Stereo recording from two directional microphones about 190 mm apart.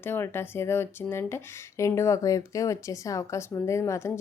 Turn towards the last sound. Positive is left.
turn(degrees=15)  # may be behind; listen again after turning